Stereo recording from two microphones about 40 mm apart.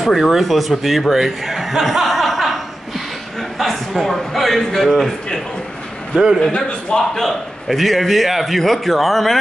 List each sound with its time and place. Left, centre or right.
0.0 s a man's voice: centre
6.1 s a man's voice: centre
6.5 s a man's voice: left
7.2 s a man's voice: centre